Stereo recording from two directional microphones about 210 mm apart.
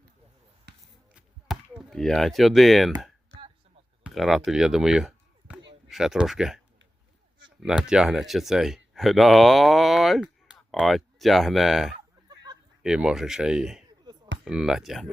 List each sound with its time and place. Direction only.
0.7 s basketball bounce: 55° right (ahead or behind)
1.1 s speech: centre (ahead or behind)
4.0 s speech: centre (ahead or behind)
7.6 s speech: 5° right (ahead or behind)
12.3 s a sound: 20° right (ahead or behind)
12.8 s speech: 5° right (ahead or behind)